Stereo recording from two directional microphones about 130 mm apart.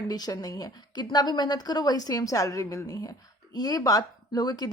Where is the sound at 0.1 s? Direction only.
30° left (ahead or behind).